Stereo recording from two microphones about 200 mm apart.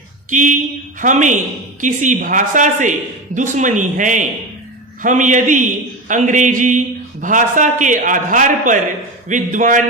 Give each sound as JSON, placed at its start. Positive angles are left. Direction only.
{"t": 0.3, "sound": "a man's voice", "side_deg": -40}